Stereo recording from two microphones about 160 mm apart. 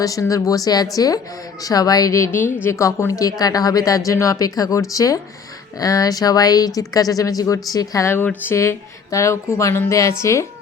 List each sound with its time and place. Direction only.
0.0 s speech: 20° left (ahead or behind)